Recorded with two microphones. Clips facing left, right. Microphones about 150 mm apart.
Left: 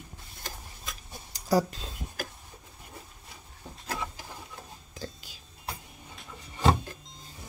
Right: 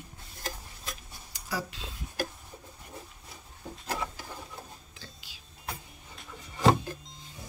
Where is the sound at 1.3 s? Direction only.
40° left (ahead or behind).